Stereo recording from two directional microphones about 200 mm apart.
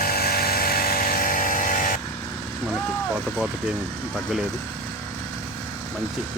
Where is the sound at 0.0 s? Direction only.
50° left (ahead or behind).